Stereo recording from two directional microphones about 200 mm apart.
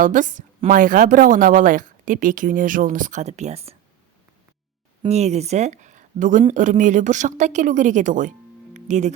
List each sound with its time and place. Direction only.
0.0 s a woman's voice: 40° right (ahead or behind)
5.0 s a woman's voice: 35° right (ahead or behind)
8.7 s music: 35° right (ahead or behind)